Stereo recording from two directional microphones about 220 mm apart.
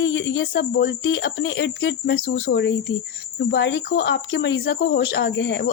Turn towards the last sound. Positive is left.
turn(degrees=55)  # may be behind; listen again after turning